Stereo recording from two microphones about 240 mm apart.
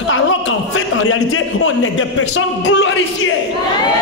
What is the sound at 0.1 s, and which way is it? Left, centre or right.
A man's voice, left.